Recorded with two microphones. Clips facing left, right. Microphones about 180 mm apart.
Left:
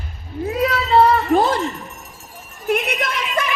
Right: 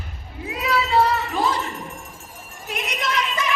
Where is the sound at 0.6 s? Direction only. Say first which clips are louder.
Left 4 dB; 45° left (ahead or behind).